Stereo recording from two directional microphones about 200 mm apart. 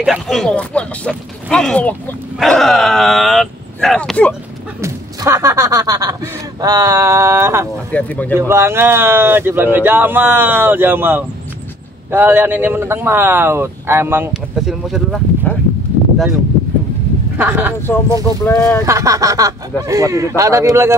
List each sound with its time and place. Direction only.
0.0 s speech: centre (ahead or behind)
4.8 s speech: 15° right (ahead or behind)
7.9 s speech: 10° left (ahead or behind)
8.4 s speech: 15° right (ahead or behind)
17.4 s speech: 10° right (ahead or behind)
18.1 s speech: 15° left (ahead or behind)
18.9 s speech: 15° right (ahead or behind)